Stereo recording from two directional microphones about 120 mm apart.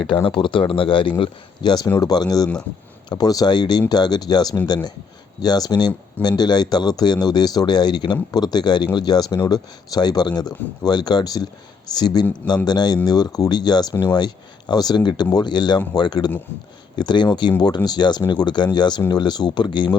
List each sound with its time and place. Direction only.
0.3 s speech: 45° left (ahead or behind)